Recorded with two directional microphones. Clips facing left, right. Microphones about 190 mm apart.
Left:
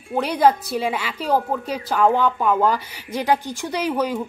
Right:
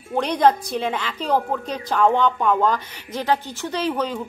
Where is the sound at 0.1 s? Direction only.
5° left (ahead or behind).